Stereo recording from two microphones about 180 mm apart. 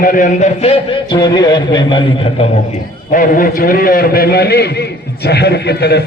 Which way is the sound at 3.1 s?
50° left (ahead or behind).